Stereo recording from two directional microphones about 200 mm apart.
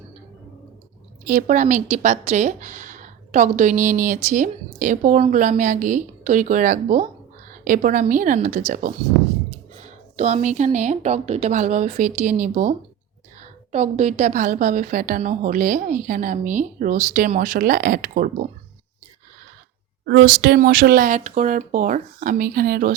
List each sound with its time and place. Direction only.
1.3 s a woman's voice: 40° right (ahead or behind)
20.1 s speech: 55° right (ahead or behind)
20.6 s a woman's voice: 45° right (ahead or behind)